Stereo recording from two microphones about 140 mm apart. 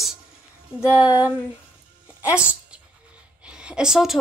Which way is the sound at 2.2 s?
10° right (ahead or behind).